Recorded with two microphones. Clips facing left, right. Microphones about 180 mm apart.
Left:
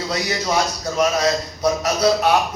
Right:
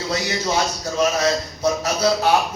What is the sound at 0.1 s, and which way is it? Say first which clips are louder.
A man's voice: even; 30° right (ahead or behind).